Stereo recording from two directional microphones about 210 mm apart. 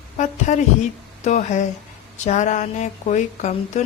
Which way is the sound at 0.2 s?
35° left (ahead or behind).